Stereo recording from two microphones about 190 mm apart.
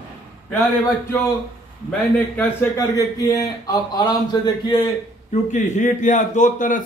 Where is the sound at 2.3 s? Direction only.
10° left (ahead or behind).